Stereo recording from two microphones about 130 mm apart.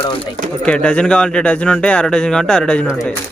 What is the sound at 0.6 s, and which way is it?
Speech, 10° left (ahead or behind).